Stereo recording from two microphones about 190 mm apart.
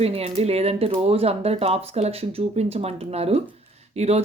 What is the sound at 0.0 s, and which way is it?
Speech, 30° right (ahead or behind).